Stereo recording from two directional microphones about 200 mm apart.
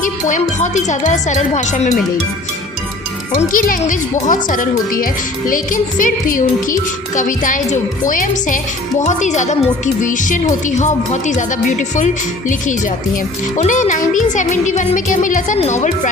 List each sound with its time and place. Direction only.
0.0 s a woman's voice: 40° left (ahead or behind)
3.3 s a woman's voice: 45° left (ahead or behind)